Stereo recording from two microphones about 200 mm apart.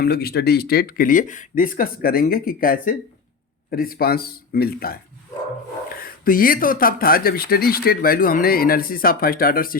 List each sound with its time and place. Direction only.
0.0 s speech: 50° left (ahead or behind)
6.0 s speech: 45° left (ahead or behind)